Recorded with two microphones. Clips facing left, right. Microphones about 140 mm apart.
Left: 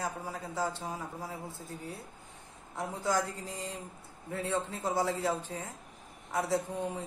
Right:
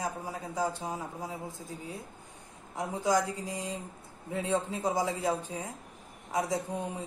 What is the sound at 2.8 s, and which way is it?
Speech, 15° right (ahead or behind).